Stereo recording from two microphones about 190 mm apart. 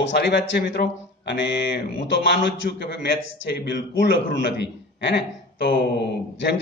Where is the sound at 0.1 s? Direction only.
60° left (ahead or behind).